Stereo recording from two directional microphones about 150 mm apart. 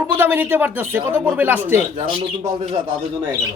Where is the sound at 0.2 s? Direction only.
15° right (ahead or behind).